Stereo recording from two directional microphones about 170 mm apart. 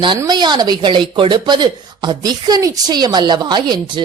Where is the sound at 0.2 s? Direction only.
25° right (ahead or behind).